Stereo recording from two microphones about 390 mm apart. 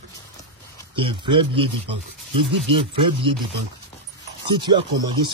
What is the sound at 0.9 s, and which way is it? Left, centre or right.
Speech, centre.